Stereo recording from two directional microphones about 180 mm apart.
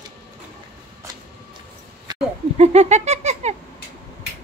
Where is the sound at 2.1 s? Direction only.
25° right (ahead or behind).